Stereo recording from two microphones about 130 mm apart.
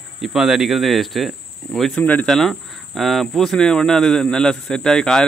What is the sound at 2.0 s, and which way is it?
Speech, 10° left (ahead or behind).